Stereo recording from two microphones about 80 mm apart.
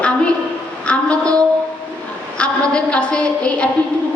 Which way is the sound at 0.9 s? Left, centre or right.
Centre.